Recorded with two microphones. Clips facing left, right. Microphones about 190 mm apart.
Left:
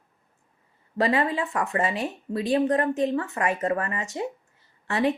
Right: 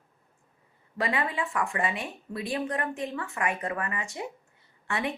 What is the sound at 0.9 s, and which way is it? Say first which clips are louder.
Speech: left 6 dB; 40° left (ahead or behind).